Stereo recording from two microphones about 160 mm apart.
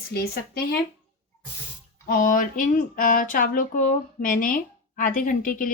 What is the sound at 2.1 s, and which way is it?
Speech, 60° left (ahead or behind).